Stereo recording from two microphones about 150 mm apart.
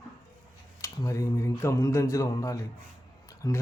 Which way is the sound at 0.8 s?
20° left (ahead or behind).